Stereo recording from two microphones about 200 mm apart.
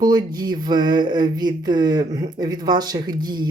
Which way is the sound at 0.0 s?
20° right (ahead or behind).